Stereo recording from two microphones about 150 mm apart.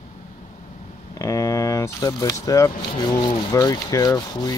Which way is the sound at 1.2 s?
20° left (ahead or behind).